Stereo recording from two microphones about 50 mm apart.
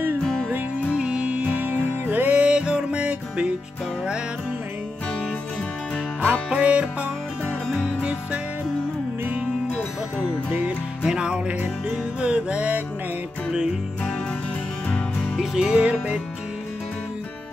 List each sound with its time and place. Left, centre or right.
0.9 s music: right
6.2 s music: right
11.1 s music: centre
14.9 s music: left
15.3 s music: centre
15.8 s music: right